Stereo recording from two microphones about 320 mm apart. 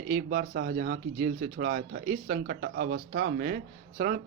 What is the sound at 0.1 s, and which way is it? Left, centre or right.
Speech, right.